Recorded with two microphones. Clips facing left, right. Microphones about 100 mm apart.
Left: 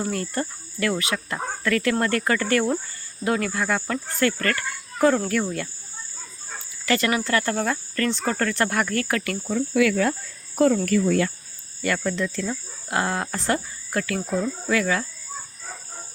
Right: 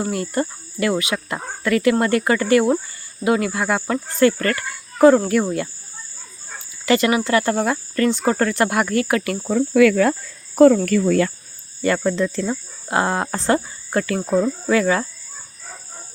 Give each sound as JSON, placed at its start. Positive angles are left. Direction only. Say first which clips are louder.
{"t": 0.0, "sound": "cricket", "louder": "right 4 dB", "side_deg": -15}
{"t": 3.2, "sound": "speech", "louder": "right 5 dB", "side_deg": -15}
{"t": 6.8, "sound": "cricket", "louder": "right 5 dB", "side_deg": -20}
{"t": 9.5, "sound": "insect", "louder": "right 7 dB", "side_deg": -55}
{"t": 10.1, "sound": "speech", "louder": "right 5 dB", "side_deg": -70}
{"t": 11.8, "sound": "speech", "louder": "right 6 dB", "side_deg": -30}